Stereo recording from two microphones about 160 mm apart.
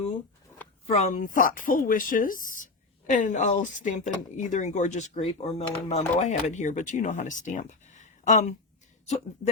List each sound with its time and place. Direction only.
0.9 s speech: 45° left (ahead or behind)